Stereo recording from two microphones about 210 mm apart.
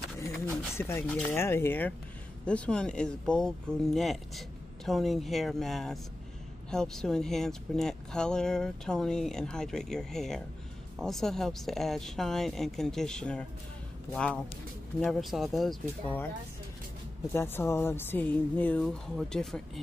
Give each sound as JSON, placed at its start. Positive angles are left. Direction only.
{"t": 0.5, "sound": "speech", "side_deg": 10}
{"t": 17.3, "sound": "speech", "side_deg": 10}